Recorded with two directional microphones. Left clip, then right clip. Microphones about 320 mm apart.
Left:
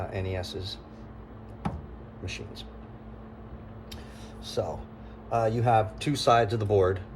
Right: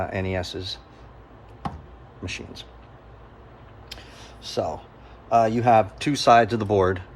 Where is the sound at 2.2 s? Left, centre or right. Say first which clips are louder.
Right 5 dB; right.